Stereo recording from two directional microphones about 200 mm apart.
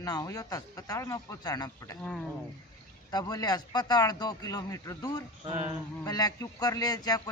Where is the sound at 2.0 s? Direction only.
5° left (ahead or behind).